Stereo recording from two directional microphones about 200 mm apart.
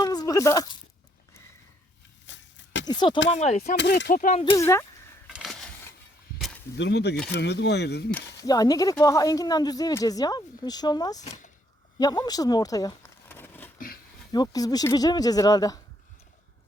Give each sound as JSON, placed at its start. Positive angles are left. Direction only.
{"t": 0.0, "sound": "a sound", "side_deg": 20}
{"t": 2.2, "sound": "a sound", "side_deg": 65}
{"t": 2.8, "sound": "speech", "side_deg": 20}
{"t": 3.3, "sound": "speech", "side_deg": 35}
{"t": 3.8, "sound": "speech", "side_deg": 60}
{"t": 4.1, "sound": "speech", "side_deg": 40}
{"t": 4.5, "sound": "speech", "side_deg": 15}
{"t": 5.3, "sound": "a sound", "side_deg": 0}
{"t": 6.7, "sound": "speech", "side_deg": 60}
{"t": 8.1, "sound": "speech", "side_deg": 20}
{"t": 11.2, "sound": "speech", "side_deg": 35}
{"t": 11.9, "sound": "speech", "side_deg": 20}
{"t": 13.7, "sound": "a sound", "side_deg": 45}
{"t": 14.3, "sound": "speech", "side_deg": 20}